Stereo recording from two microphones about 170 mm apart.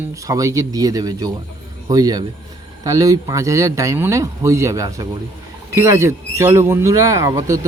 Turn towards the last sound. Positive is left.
turn(degrees=-20)  # may be behind; listen again after turning